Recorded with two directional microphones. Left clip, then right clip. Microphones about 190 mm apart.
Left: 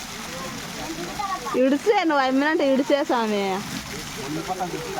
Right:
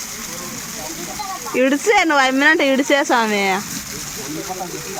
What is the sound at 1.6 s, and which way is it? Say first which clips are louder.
Speech: right 5 dB; 10° right (ahead or behind).